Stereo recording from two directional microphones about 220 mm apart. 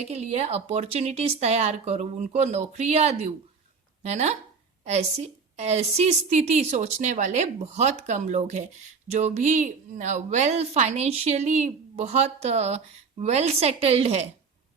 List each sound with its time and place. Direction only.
0.0 s a woman's voice: 30° right (ahead or behind)